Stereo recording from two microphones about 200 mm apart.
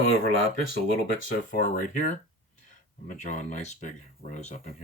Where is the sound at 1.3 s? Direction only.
45° left (ahead or behind).